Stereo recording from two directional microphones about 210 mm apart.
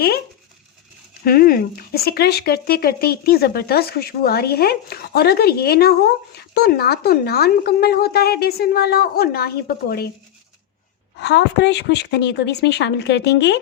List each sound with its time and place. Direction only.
1.2 s speech: 45° left (ahead or behind)
11.2 s speech: 55° left (ahead or behind)